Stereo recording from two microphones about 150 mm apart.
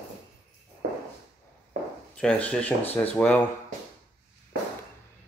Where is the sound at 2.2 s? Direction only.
10° left (ahead or behind).